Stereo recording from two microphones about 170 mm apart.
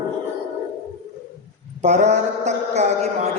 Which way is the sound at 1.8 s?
40° right (ahead or behind).